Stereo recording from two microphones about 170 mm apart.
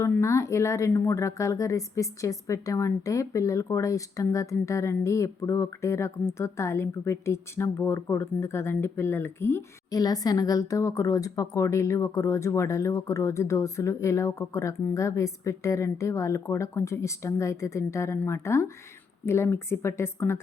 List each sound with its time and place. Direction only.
0.0 s speech: 15° left (ahead or behind)